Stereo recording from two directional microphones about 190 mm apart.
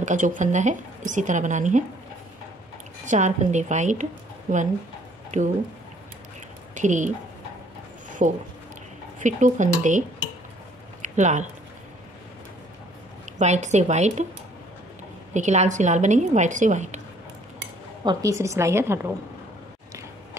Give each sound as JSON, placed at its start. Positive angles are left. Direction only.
{"t": 0.0, "sound": "speech", "side_deg": -40}
{"t": 3.1, "sound": "speech", "side_deg": -40}
{"t": 6.7, "sound": "speech", "side_deg": -40}
{"t": 8.2, "sound": "speech", "side_deg": -40}
{"t": 11.0, "sound": "a sound", "side_deg": -40}
{"t": 13.2, "sound": "a woman's voice", "side_deg": -40}
{"t": 15.3, "sound": "speech", "side_deg": -40}
{"t": 18.0, "sound": "a woman's voice", "side_deg": -15}